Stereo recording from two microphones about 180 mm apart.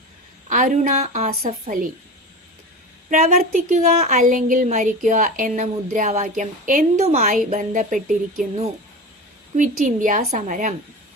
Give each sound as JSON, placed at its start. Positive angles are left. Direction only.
{"t": 0.4, "sound": "a woman's voice", "side_deg": -45}
{"t": 3.1, "sound": "a woman's voice", "side_deg": -40}
{"t": 9.6, "sound": "a woman's voice", "side_deg": -45}